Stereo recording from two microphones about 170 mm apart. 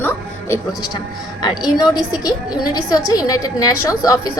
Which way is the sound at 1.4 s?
25° left (ahead or behind).